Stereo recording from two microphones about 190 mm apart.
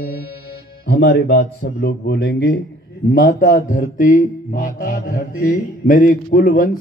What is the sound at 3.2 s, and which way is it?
Mantra, 45° left (ahead or behind).